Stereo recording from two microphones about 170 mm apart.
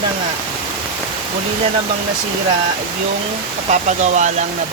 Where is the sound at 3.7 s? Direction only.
45° right (ahead or behind).